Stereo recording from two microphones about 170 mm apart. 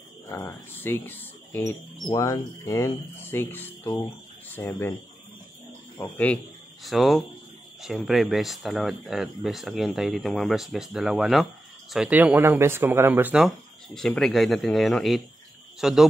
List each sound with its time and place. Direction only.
0.3 s speech: 15° left (ahead or behind)
6.0 s speech: 10° left (ahead or behind); by 13.5 s 10° right (ahead or behind)
13.9 s speech: centre (ahead or behind)